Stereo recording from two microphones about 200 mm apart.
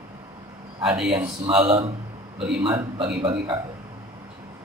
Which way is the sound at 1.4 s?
25° right (ahead or behind).